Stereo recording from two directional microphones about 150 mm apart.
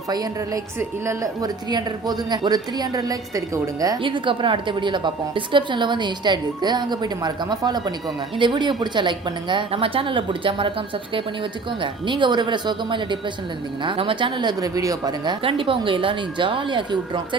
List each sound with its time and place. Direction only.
0.1 s a woman's voice: 25° right (ahead or behind)